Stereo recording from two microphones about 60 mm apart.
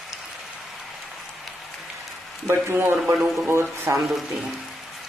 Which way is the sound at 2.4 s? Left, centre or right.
Right.